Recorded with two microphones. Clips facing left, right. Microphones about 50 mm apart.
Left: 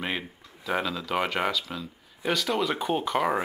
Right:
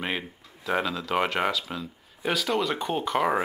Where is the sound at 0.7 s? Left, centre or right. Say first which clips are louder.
Right 1 dB; centre.